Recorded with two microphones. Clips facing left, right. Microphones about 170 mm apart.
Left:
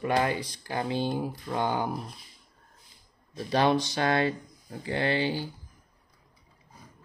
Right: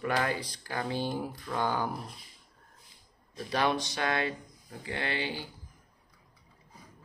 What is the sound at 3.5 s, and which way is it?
Speech, 30° left (ahead or behind).